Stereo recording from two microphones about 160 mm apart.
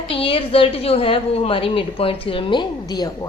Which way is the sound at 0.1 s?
35° left (ahead or behind).